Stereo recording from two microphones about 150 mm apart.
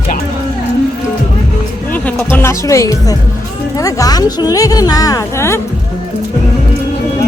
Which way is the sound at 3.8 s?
20° left (ahead or behind).